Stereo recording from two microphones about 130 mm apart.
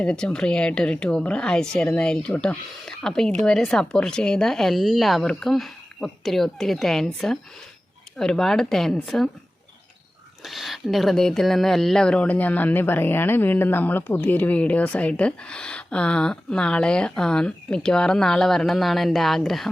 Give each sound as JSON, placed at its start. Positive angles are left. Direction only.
{"t": 0.0, "sound": "speech", "side_deg": 5}
{"t": 10.4, "sound": "speech", "side_deg": 0}